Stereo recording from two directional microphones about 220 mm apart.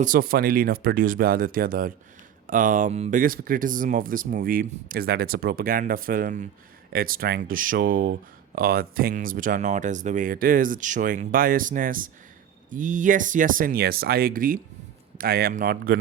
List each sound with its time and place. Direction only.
0.0 s speech: 40° right (ahead or behind)